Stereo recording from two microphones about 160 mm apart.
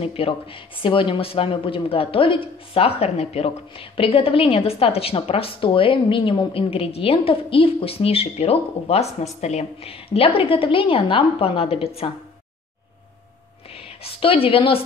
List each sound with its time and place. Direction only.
0.0 s speech: 35° left (ahead or behind)
14.0 s speech: 35° left (ahead or behind)